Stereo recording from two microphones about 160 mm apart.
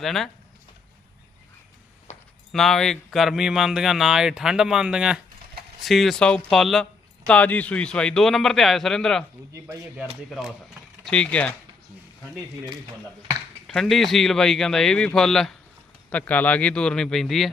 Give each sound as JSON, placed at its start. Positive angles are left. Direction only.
{"t": 0.0, "sound": "speech", "side_deg": 0}
{"t": 2.1, "sound": "a sound", "side_deg": 45}
{"t": 2.5, "sound": "speech", "side_deg": 0}
{"t": 9.5, "sound": "speech", "side_deg": -15}
{"t": 10.2, "sound": "speech", "side_deg": 0}
{"t": 13.7, "sound": "speech", "side_deg": 0}